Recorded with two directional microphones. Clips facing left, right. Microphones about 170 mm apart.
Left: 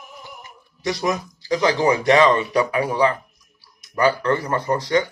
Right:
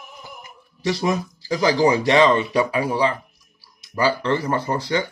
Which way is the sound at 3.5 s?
30° right (ahead or behind).